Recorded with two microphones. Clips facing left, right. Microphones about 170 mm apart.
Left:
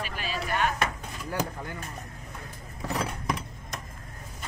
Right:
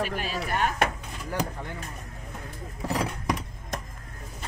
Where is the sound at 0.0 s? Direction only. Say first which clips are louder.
Right 4 dB; 50° right (ahead or behind).